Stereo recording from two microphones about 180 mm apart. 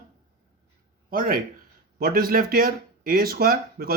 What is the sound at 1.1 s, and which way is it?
Speech, 50° right (ahead or behind).